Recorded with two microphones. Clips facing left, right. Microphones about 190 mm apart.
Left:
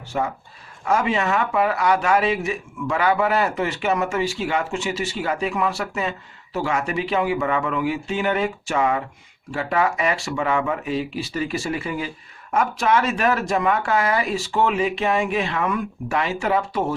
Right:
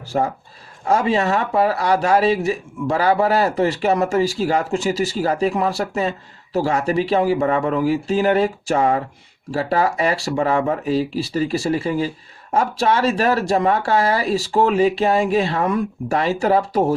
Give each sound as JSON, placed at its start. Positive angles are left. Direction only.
{"t": 0.1, "sound": "speech", "side_deg": -40}